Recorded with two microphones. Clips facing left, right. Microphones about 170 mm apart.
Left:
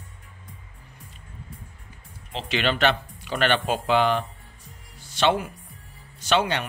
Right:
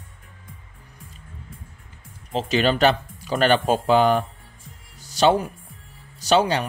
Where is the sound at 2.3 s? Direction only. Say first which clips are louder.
Right 5 dB; 40° right (ahead or behind).